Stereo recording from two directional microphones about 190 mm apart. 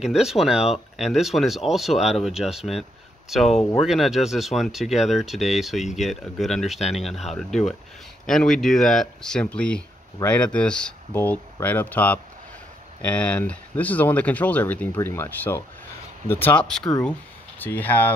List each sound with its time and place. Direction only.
0.0 s speech: centre (ahead or behind)